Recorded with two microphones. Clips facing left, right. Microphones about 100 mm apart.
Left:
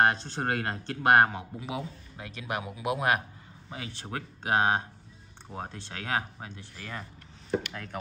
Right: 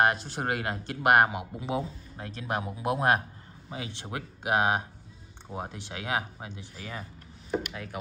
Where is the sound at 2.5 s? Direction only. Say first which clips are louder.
Right 2 dB; 35° right (ahead or behind).